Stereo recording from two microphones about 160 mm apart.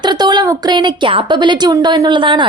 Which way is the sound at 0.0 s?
25° right (ahead or behind).